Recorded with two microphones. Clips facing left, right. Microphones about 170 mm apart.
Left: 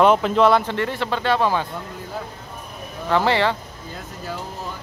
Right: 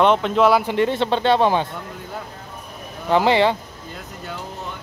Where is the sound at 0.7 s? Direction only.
20° right (ahead or behind).